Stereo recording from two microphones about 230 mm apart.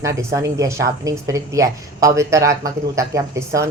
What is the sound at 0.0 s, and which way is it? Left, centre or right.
Speech, centre.